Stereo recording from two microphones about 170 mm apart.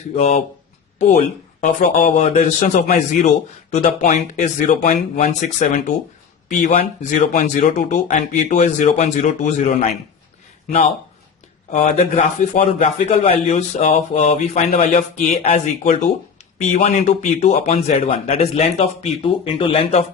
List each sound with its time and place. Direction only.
0.2 s speech: 40° left (ahead or behind)
1.6 s speech: 45° left (ahead or behind)
14.7 s speech: 50° left (ahead or behind)